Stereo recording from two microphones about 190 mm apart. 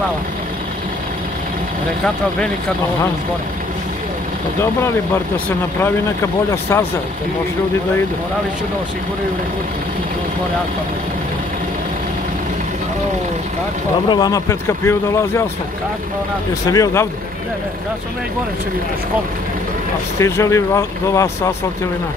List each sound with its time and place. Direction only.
6.5 s speech: 10° left (ahead or behind)
14.0 s speech: 20° left (ahead or behind)
16.7 s speech: 15° left (ahead or behind)
20.2 s speech: 15° left (ahead or behind)